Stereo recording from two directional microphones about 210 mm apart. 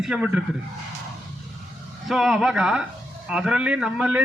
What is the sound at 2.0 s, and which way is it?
Speech, centre (ahead or behind).